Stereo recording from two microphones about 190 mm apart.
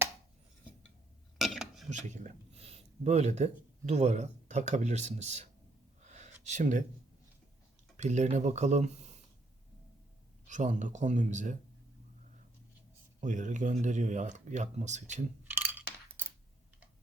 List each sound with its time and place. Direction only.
1.4 s dishes: centre (ahead or behind)
1.9 s speech: 40° right (ahead or behind)
6.0 s a sound: 40° right (ahead or behind)
7.9 s speech: 40° right (ahead or behind)
10.4 s speech: 40° right (ahead or behind)
13.1 s speech: 40° right (ahead or behind)
15.4 s a sound: 10° right (ahead or behind)